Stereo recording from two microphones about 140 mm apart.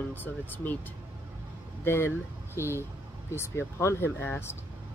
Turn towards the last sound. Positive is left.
turn(degrees=15)  # may be behind; listen again after turning